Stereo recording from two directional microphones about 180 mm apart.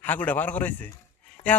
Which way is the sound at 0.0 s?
10° left (ahead or behind).